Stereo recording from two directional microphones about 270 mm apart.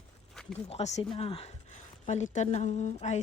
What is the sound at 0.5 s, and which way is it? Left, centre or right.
Speech, left.